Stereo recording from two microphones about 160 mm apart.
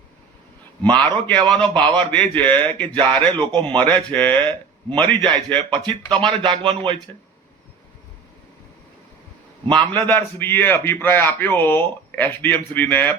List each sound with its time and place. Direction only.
0.8 s a man's voice: 10° left (ahead or behind)
5.2 s speech: 30° right (ahead or behind)
5.5 s a man's voice: 5° left (ahead or behind)
6.1 s a man's voice: 30° right (ahead or behind)
9.9 s a man's voice: 10° left (ahead or behind)